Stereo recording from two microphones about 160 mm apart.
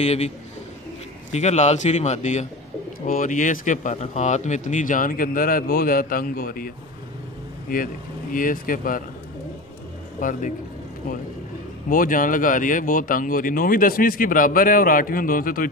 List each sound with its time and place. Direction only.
0.0 s a man's voice: 40° left (ahead or behind)
1.3 s a man's voice: 45° left (ahead or behind); by 6.7 s 65° left (ahead or behind)
7.7 s speech: 60° left (ahead or behind)
10.2 s speech: 55° left (ahead or behind)
11.9 s speech: 60° left (ahead or behind)